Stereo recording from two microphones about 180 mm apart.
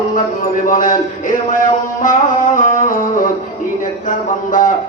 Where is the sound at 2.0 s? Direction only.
45° left (ahead or behind).